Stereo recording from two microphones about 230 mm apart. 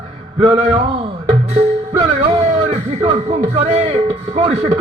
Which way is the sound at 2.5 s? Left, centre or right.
Right.